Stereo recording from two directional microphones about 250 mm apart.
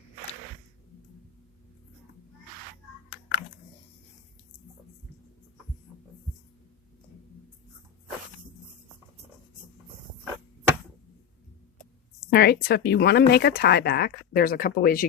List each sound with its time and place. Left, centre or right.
12.3 s speech: left